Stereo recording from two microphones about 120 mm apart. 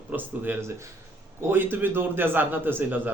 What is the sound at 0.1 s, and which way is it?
A man's voice, 15° right (ahead or behind).